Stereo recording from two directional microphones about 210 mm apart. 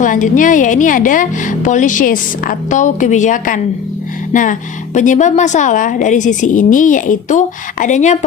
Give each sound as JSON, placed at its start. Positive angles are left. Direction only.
{"t": 0.0, "sound": "speech", "side_deg": 40}